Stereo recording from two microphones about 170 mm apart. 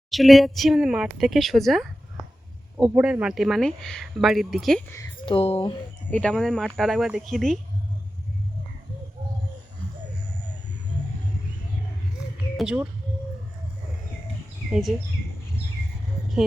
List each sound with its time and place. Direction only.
0.1 s speech: centre (ahead or behind)
5.2 s speech: 35° left (ahead or behind)
6.1 s speech: 5° left (ahead or behind)
12.5 s speech: 5° right (ahead or behind)
14.7 s speech: centre (ahead or behind)